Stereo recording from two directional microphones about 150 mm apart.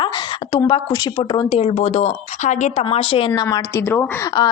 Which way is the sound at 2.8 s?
40° left (ahead or behind).